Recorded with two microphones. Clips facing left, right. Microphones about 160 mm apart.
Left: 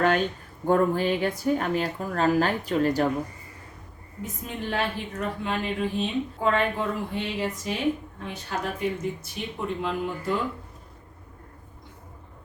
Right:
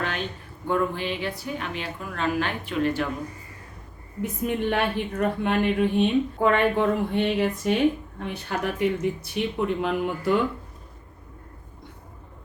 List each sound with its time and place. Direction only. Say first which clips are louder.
0.7 s speech: left 4 dB; 45° left (ahead or behind)
4.2 s speech: right 8 dB; 65° right (ahead or behind)